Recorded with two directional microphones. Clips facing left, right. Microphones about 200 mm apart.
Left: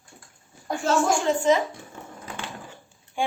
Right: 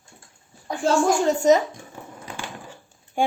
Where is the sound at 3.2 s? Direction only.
45° right (ahead or behind).